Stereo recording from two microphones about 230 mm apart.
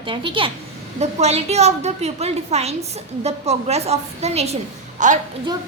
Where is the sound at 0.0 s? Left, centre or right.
Right.